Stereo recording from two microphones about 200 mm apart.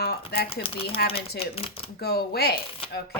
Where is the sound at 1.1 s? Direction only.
30° left (ahead or behind).